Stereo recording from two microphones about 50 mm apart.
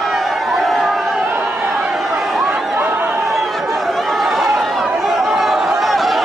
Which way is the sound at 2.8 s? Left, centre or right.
Right.